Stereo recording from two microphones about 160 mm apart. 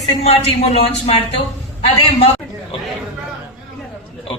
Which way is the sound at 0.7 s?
40° left (ahead or behind).